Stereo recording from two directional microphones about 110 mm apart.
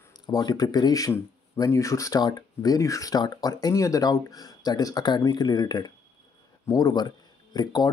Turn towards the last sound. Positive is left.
turn(degrees=40)  # may be behind; listen again after turning